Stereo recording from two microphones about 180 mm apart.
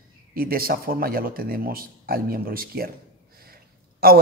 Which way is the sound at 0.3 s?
55° right (ahead or behind).